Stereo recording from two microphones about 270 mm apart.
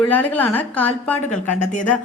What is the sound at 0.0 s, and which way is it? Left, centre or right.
A woman's voice, centre.